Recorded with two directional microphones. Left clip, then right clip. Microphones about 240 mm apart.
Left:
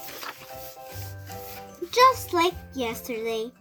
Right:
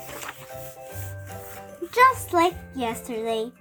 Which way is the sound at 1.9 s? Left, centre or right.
Right.